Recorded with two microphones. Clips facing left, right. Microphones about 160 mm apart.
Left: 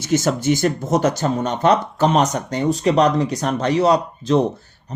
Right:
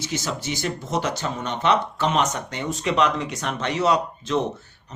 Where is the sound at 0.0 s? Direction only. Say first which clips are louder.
Left 10 dB; 50° left (ahead or behind).